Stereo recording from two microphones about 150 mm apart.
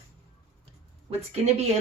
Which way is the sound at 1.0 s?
45° right (ahead or behind).